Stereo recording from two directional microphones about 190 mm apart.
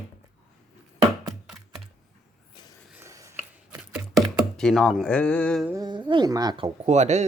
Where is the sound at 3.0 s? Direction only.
15° right (ahead or behind).